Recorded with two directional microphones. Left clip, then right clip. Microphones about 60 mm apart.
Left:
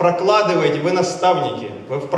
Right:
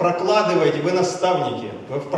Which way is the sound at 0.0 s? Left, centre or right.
Centre.